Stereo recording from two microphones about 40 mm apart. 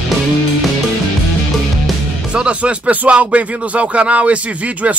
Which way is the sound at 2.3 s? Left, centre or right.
Right.